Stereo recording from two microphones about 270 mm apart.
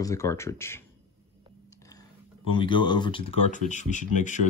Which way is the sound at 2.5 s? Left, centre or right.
Centre.